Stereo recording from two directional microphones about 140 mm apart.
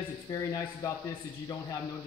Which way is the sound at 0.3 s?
25° left (ahead or behind).